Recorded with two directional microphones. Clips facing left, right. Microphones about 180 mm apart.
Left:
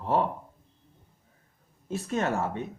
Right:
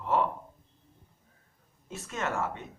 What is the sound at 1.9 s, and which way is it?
Speech, 35° left (ahead or behind).